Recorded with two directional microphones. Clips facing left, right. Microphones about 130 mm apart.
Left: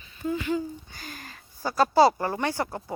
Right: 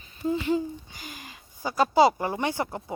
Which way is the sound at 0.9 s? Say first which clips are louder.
Left 1 dB; 15° right (ahead or behind).